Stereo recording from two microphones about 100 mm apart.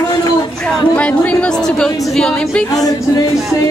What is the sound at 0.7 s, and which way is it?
Speech, 10° left (ahead or behind).